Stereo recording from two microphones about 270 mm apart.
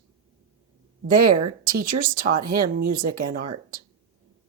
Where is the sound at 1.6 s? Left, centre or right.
Right.